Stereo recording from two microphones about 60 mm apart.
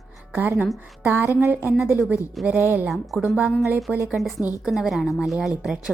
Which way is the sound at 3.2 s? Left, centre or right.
Right.